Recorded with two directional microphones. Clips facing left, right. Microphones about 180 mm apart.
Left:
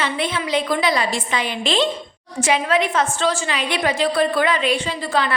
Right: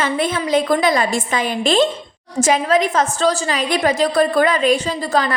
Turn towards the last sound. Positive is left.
turn(degrees=-40)  # may be behind; listen again after turning